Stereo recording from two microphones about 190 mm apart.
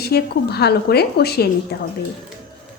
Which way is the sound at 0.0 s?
55° left (ahead or behind).